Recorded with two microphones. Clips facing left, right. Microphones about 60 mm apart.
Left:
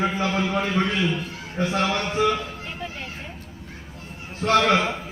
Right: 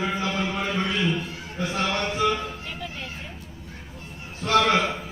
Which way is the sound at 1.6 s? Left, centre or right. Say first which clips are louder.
Left 3 dB; left.